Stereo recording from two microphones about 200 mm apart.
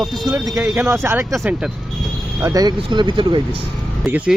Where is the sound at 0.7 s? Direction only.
10° right (ahead or behind).